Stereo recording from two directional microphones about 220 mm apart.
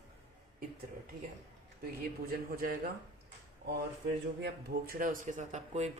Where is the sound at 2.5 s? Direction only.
40° right (ahead or behind).